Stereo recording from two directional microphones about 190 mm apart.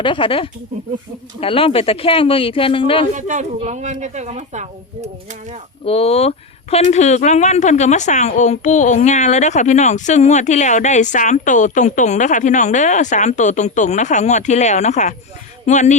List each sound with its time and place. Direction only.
0.0 s speech: 25° left (ahead or behind)
3.2 s a woman's voice: 40° right (ahead or behind)
5.8 s speech: 30° left (ahead or behind)